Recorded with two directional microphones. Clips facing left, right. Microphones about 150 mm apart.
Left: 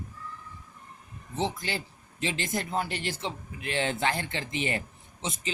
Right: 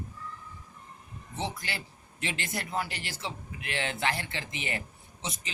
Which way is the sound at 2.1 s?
30° left (ahead or behind).